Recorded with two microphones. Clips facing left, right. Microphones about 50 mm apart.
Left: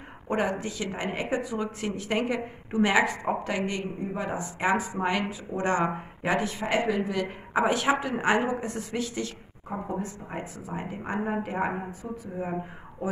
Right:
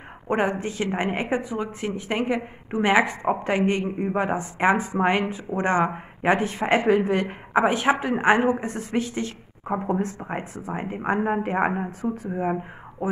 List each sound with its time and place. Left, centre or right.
0.3 s speech: right
1.8 s a woman's voice: centre; by 7.3 s right
7.5 s a woman's voice: right
9.8 s speech: right
10.2 s speech: right
12.0 s speech: right